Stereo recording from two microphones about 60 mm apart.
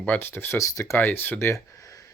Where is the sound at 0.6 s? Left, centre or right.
Left.